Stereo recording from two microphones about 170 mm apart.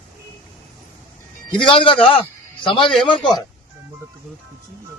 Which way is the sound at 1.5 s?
30° left (ahead or behind).